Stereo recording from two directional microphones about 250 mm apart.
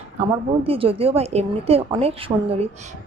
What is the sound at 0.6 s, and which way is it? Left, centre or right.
A woman's voice, right.